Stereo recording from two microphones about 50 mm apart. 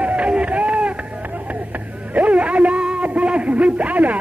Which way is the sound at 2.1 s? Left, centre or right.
Right.